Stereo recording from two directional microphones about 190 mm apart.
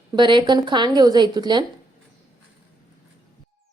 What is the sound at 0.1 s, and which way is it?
Speech, 25° right (ahead or behind).